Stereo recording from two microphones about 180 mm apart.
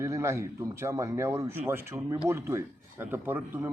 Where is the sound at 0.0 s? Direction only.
15° right (ahead or behind).